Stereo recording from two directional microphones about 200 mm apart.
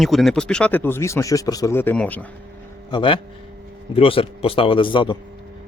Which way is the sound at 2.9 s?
25° left (ahead or behind).